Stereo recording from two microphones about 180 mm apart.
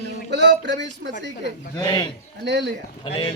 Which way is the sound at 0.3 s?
75° right (ahead or behind).